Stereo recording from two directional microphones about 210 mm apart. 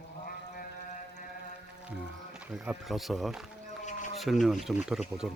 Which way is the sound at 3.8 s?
35° left (ahead or behind).